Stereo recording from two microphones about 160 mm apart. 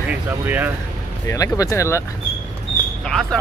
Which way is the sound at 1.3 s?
20° left (ahead or behind).